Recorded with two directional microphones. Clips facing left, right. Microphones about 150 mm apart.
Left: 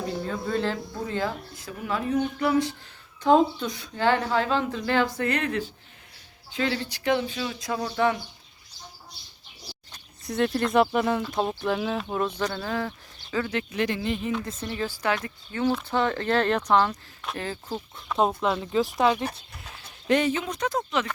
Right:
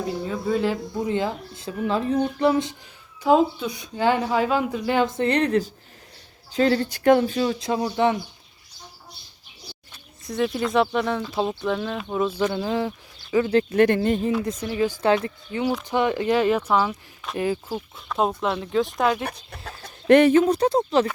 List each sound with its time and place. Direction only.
0.3 s speech: 5° right (ahead or behind); by 2.7 s 25° right (ahead or behind)
3.2 s speech: 5° right (ahead or behind); by 7.5 s 45° right (ahead or behind)
7.6 s speech: 20° right (ahead or behind)
10.2 s speech: centre (ahead or behind)
12.5 s speech: 20° right (ahead or behind)
13.7 s speech: 55° right (ahead or behind)
15.0 s speech: 30° right (ahead or behind)
15.8 s speech: 15° right (ahead or behind)
18.1 s speech: centre (ahead or behind)
19.6 s chicken: 60° right (ahead or behind)
20.4 s speech: 35° right (ahead or behind)